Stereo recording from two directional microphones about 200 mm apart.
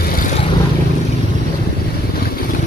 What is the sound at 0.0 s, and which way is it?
Vehicle, 45° left (ahead or behind).